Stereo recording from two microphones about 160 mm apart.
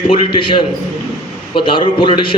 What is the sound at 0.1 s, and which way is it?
A man's voice, 35° left (ahead or behind).